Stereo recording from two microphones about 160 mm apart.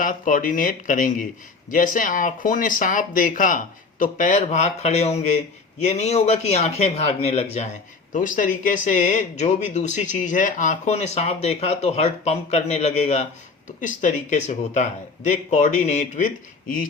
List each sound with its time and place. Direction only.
0.0 s speech: 60° left (ahead or behind); by 7.7 s 40° left (ahead or behind)
8.1 s speech: 55° left (ahead or behind)